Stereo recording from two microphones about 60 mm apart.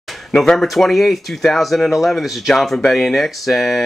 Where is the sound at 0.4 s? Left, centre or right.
Centre.